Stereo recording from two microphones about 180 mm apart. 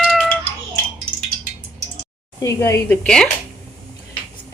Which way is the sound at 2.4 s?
15° left (ahead or behind).